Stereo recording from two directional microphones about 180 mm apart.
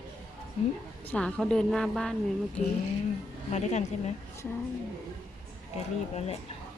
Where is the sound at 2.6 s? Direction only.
40° left (ahead or behind).